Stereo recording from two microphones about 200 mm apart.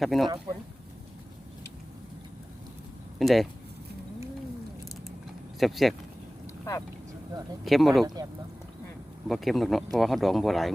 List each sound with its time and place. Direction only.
0.0 s speech: centre (ahead or behind)
3.2 s speech: centre (ahead or behind)
5.5 s speech: centre (ahead or behind)
7.6 s speech: centre (ahead or behind)
8.0 s speech: 20° right (ahead or behind)
9.2 s speech: centre (ahead or behind)